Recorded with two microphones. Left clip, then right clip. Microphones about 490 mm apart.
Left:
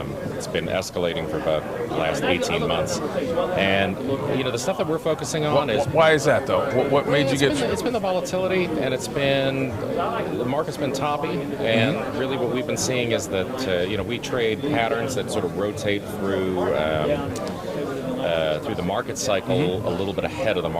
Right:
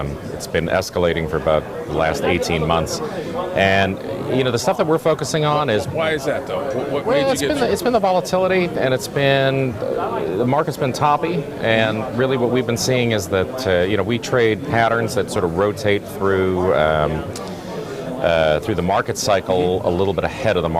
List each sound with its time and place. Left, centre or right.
0.5 s a man's voice: right
6.0 s speech: left
7.7 s a man's voice: right
11.0 s a man's voice: right
18.3 s a man's voice: right